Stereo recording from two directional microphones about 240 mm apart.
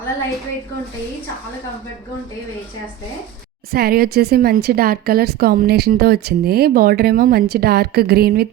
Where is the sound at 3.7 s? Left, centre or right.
Right.